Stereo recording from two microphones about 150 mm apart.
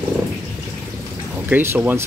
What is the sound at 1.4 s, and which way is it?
Speech, 15° right (ahead or behind).